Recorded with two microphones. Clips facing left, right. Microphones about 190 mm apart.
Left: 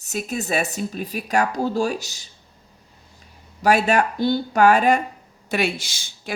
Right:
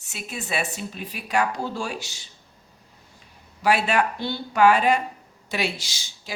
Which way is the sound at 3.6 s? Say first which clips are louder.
Left 3 dB; 45° left (ahead or behind).